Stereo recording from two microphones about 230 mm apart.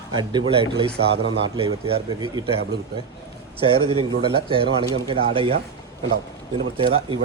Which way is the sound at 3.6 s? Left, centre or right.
Right.